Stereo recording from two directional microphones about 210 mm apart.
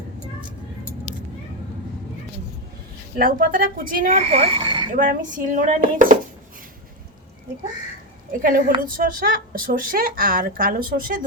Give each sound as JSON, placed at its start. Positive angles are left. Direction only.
{"t": 3.2, "sound": "speech", "side_deg": -40}
{"t": 4.9, "sound": "speech", "side_deg": -40}
{"t": 8.3, "sound": "a woman's voice", "side_deg": -40}